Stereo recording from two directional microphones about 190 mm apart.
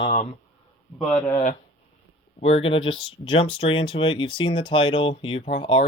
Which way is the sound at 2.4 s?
30° left (ahead or behind).